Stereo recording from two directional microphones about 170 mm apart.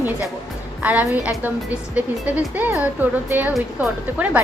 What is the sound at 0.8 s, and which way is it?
A woman's voice, 10° right (ahead or behind).